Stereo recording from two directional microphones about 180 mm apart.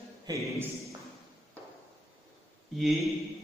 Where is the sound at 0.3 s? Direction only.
15° right (ahead or behind).